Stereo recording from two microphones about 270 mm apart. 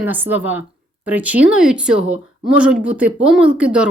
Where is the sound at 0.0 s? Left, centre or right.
Centre.